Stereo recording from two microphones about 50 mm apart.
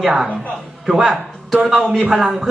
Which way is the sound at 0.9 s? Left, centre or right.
Centre.